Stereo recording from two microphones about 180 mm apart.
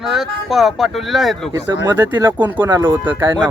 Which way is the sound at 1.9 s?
25° right (ahead or behind).